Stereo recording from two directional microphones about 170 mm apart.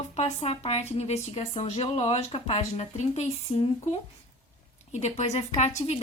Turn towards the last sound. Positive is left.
turn(degrees=40)  # may be behind; listen again after turning